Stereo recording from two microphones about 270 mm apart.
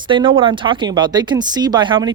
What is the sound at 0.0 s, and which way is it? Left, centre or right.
Speech, centre.